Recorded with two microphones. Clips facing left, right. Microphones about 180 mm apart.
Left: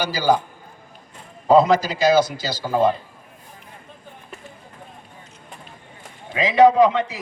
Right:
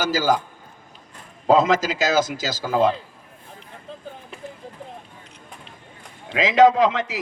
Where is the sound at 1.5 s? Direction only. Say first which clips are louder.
Left 2 dB; 90° right.